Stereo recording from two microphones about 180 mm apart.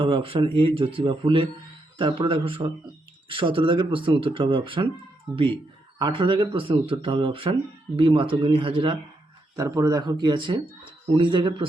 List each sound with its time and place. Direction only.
0.0 s speech: 30° right (ahead or behind)
6.0 s speech: 25° right (ahead or behind)
9.6 s speech: 20° right (ahead or behind)